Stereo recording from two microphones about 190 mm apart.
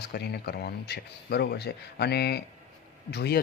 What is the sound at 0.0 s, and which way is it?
Speech, 55° left (ahead or behind).